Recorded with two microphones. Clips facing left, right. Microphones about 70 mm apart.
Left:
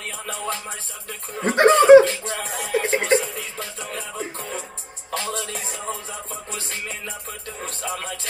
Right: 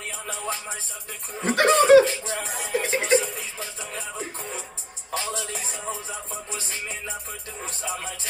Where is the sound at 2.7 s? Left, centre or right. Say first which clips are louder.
Left 4 dB; left.